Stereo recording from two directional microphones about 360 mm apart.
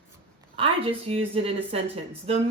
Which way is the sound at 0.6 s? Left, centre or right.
Centre.